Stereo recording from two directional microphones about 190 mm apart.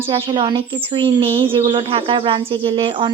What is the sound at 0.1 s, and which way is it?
Speech, 25° right (ahead or behind).